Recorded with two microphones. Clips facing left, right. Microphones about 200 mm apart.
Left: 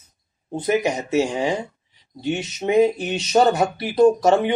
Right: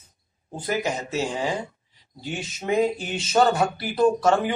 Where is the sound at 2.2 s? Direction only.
20° left (ahead or behind).